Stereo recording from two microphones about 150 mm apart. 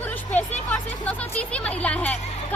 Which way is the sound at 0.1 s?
10° left (ahead or behind).